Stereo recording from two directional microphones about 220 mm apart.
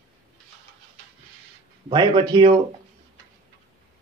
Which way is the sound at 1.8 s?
20° right (ahead or behind).